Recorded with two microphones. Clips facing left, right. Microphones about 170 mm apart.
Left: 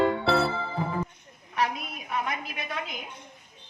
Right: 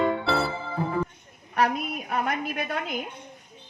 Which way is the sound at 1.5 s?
55° right (ahead or behind).